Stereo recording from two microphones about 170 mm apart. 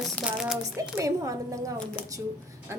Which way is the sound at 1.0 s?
20° right (ahead or behind).